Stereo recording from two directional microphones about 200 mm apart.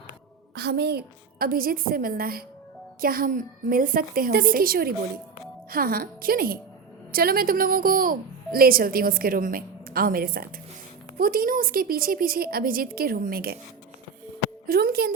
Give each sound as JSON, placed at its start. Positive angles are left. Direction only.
{"t": 0.5, "sound": "a woman's voice", "side_deg": -55}
{"t": 14.7, "sound": "a woman's voice", "side_deg": -50}